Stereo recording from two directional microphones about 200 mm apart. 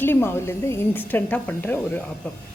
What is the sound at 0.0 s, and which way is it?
A woman's voice, 10° left (ahead or behind).